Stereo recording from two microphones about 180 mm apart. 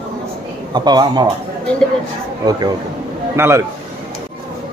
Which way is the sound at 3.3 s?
15° right (ahead or behind).